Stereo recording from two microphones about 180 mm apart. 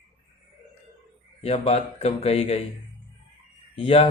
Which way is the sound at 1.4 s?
35° left (ahead or behind).